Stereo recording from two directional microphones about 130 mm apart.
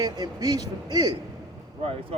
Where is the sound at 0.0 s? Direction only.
30° right (ahead or behind).